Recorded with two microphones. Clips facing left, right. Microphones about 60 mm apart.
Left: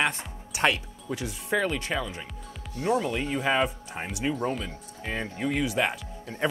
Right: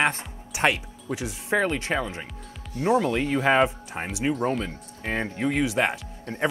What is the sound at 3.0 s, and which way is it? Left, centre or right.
Speech, right.